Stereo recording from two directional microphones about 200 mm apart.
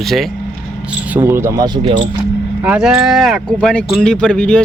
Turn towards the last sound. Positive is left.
turn(degrees=5)  # may be behind; listen again after turning